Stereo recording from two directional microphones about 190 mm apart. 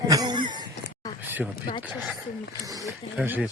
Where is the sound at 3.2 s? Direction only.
10° right (ahead or behind).